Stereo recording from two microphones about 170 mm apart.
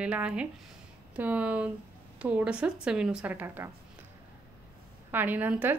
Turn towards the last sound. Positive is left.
turn(degrees=-10)  # may be behind; listen again after turning